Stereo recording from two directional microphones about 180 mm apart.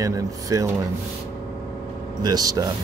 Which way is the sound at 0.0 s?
20° right (ahead or behind).